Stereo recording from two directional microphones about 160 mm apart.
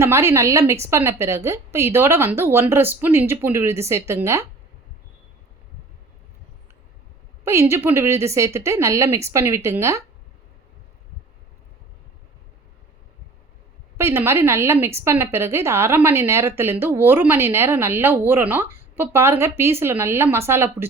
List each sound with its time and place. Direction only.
0.0 s a woman's voice: 15° right (ahead or behind)
7.4 s a woman's voice: 15° right (ahead or behind)
13.9 s a woman's voice: 15° right (ahead or behind)